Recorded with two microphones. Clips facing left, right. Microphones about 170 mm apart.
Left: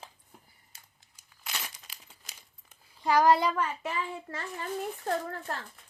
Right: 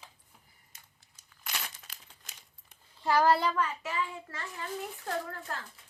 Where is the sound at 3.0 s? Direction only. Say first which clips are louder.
Left 2 dB; 15° left (ahead or behind).